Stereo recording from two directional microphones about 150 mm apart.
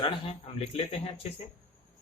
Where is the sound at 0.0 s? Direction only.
40° left (ahead or behind).